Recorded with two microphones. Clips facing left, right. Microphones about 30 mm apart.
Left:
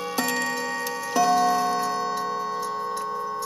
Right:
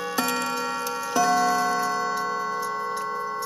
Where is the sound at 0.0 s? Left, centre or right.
Centre.